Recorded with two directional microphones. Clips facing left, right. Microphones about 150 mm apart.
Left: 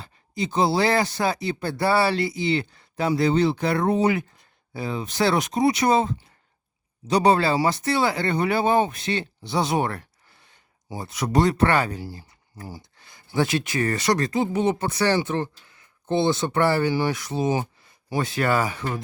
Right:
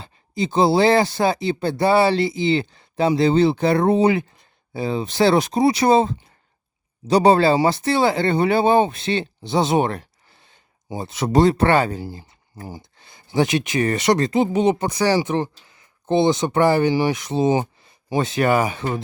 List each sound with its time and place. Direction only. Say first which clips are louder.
0.0 s speech: right 4 dB; 30° right (ahead or behind)